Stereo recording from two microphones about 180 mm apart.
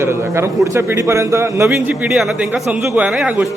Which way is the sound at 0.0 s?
15° right (ahead or behind).